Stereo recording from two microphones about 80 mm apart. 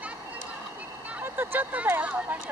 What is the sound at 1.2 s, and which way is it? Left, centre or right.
Speech, right.